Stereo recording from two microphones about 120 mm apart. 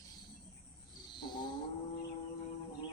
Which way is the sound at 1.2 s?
40° left (ahead or behind).